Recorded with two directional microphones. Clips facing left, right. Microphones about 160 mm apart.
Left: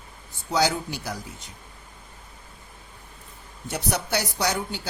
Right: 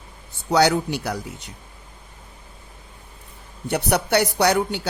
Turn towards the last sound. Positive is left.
turn(degrees=-65)  # may be behind; listen again after turning